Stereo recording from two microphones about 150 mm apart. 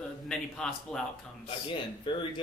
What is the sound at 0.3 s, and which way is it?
Speech, 5° left (ahead or behind).